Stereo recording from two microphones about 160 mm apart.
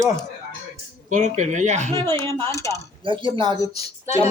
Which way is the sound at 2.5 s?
20° left (ahead or behind).